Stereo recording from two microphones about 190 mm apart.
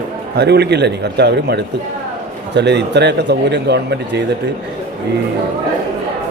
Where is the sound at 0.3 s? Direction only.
60° right (ahead or behind).